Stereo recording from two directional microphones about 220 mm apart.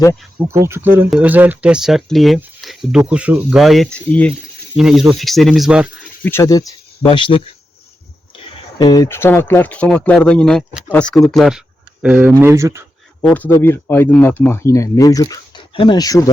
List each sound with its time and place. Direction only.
0.3 s speech: 10° right (ahead or behind)
6.2 s speech: 15° left (ahead or behind)
8.8 s speech: 15° left (ahead or behind); by 12.8 s 10° right (ahead or behind)
13.2 s speech: 5° left (ahead or behind)